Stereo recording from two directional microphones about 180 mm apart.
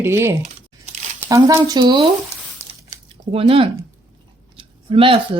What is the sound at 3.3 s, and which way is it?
Speech, 30° right (ahead or behind).